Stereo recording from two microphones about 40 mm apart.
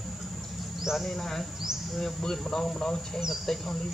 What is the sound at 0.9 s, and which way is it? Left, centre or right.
Speech, centre.